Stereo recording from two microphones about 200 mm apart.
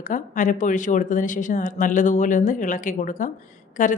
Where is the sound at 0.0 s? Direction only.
40° left (ahead or behind).